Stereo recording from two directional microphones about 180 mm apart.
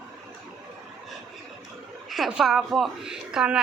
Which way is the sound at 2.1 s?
Centre (ahead or behind).